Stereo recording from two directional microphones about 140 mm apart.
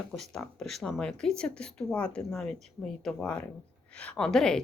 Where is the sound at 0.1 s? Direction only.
Centre (ahead or behind).